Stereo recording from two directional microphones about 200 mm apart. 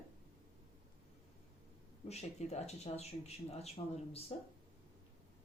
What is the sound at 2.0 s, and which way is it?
Speech, 35° left (ahead or behind).